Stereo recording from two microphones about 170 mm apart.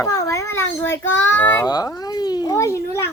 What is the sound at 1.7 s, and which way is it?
A child's voice, 20° left (ahead or behind).